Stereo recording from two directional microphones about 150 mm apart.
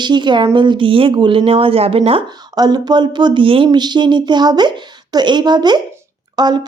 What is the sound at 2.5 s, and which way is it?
A woman's voice, 25° right (ahead or behind).